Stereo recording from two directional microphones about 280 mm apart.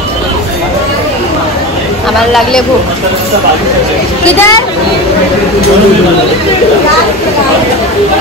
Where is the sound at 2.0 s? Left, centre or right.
Centre.